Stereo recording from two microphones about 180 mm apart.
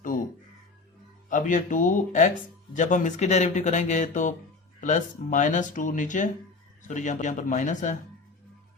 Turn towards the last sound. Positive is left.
turn(degrees=45)  # may be behind; listen again after turning